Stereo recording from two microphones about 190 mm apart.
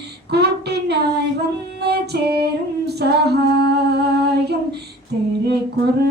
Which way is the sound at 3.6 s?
60° right (ahead or behind).